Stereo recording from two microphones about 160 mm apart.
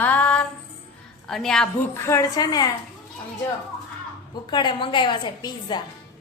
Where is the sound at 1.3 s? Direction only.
5° left (ahead or behind).